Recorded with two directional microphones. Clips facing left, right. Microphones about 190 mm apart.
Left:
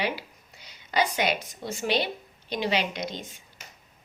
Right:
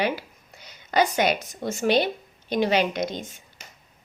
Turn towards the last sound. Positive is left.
turn(degrees=-50)  # may be behind; listen again after turning